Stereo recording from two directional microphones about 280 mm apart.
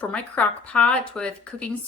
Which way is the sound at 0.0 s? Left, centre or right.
Centre.